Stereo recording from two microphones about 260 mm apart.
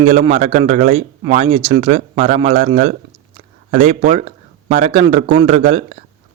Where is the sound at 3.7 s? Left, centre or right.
Right.